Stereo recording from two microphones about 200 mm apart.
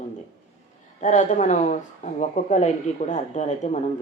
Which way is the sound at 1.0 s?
40° left (ahead or behind).